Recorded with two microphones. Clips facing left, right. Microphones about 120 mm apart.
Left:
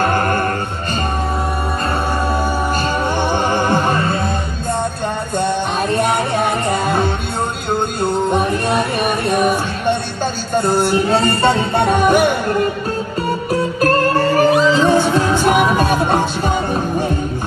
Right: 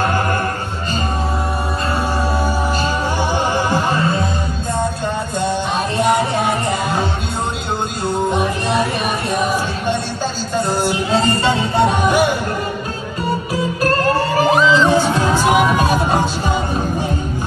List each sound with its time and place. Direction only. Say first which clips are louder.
0.0 s chant: left 2 dB; 50° left (ahead or behind)
2.4 s music: left 1 dB; 55° left (ahead or behind)
5.9 s music: right 3 dB; 55° left (ahead or behind)
8.0 s music: even; 55° left (ahead or behind)
13.5 s music: left 4 dB; 50° left (ahead or behind)